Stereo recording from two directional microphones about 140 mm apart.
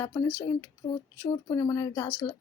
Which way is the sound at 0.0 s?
25° left (ahead or behind).